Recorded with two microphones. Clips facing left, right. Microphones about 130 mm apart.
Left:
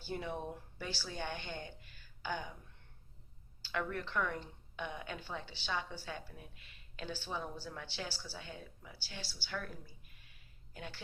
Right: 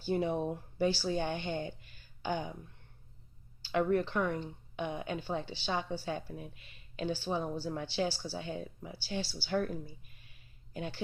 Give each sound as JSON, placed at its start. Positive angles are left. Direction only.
{"t": 0.1, "sound": "a woman's voice", "side_deg": -25}
{"t": 3.7, "sound": "a woman's voice", "side_deg": -25}
{"t": 10.8, "sound": "a woman's voice", "side_deg": -25}